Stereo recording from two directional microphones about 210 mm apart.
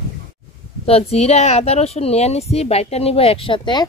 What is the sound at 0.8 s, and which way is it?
Speech, 30° left (ahead or behind).